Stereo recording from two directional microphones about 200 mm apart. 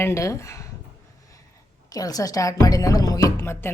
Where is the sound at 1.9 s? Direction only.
20° left (ahead or behind).